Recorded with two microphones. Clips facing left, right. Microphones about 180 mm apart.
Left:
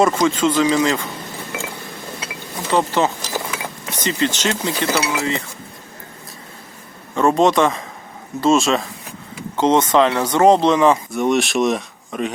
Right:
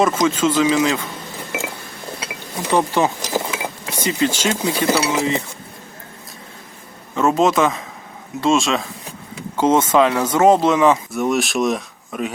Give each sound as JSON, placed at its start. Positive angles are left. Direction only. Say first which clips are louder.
{"t": 0.0, "sound": "speech", "louder": "left 1 dB", "side_deg": 0}
{"t": 2.6, "sound": "a sound", "louder": "even", "side_deg": -15}
{"t": 3.9, "sound": "speech", "louder": "right 1 dB", "side_deg": -10}
{"t": 7.2, "sound": "speech", "louder": "left 1 dB", "side_deg": 0}